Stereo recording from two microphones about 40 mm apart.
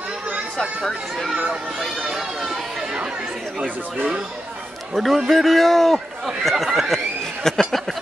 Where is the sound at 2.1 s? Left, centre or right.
Centre.